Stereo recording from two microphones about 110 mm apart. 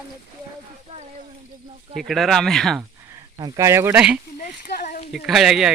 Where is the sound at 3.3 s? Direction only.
30° right (ahead or behind).